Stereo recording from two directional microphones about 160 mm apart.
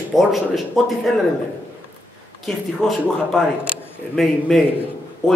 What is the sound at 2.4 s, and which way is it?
Speech, centre (ahead or behind).